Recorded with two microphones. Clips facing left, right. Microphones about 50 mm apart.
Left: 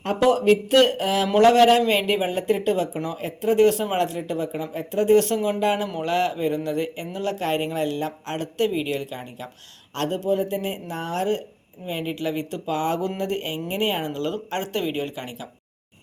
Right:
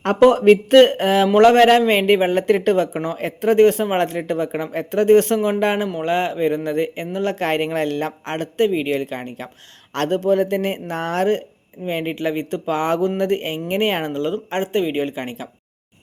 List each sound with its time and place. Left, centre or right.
0.0 s speech: right
0.3 s a man's voice: right
14.2 s a man's voice: right